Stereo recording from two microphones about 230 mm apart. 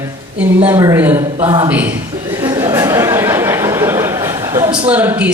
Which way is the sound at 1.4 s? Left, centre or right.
Centre.